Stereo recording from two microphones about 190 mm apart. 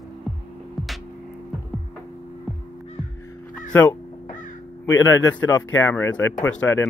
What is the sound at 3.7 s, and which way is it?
Speech, 10° left (ahead or behind).